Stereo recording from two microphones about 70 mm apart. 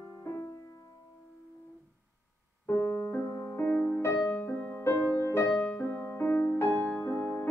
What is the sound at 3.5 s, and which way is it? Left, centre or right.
Music, left.